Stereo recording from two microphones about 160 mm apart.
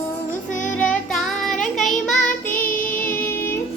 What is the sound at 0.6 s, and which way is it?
Child singing, 55° left (ahead or behind).